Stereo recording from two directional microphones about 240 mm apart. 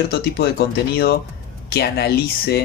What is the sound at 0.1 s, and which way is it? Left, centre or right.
Speech, left.